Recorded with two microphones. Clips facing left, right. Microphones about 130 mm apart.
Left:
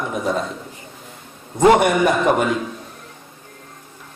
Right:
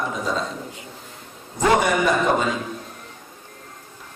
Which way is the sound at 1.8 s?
60° left (ahead or behind).